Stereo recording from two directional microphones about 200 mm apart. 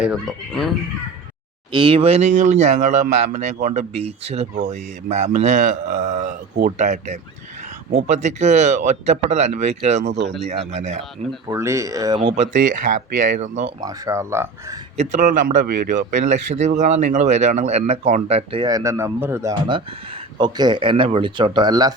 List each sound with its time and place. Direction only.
0.0 s speech: centre (ahead or behind)
1.7 s speech: 25° right (ahead or behind)
10.0 s speech: 60° right (ahead or behind)
10.4 s speech: 35° right (ahead or behind)
11.4 s speech: 15° right (ahead or behind)
12.4 s speech: 40° right (ahead or behind)
13.8 s speech: 15° right (ahead or behind)
14.9 s speech: 40° right (ahead or behind)
16.0 s speech: 35° right (ahead or behind); by 21.9 s 20° right (ahead or behind)